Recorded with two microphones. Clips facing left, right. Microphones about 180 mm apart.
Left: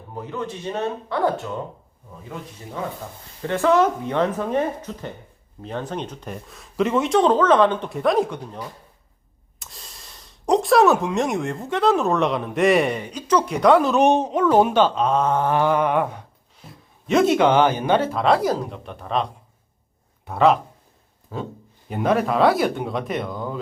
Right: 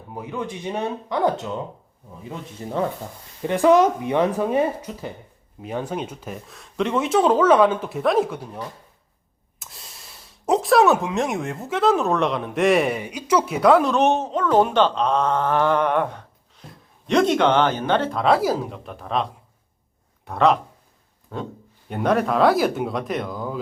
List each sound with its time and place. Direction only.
0.1 s speech: 10° right (ahead or behind)
2.6 s speech: 35° right (ahead or behind)
3.4 s speech: 15° right (ahead or behind); by 14.0 s centre (ahead or behind)
14.0 s speech: 15° left (ahead or behind); by 23.6 s centre (ahead or behind)